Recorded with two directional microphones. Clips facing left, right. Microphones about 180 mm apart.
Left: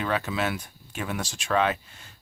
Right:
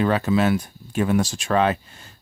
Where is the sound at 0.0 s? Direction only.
40° right (ahead or behind).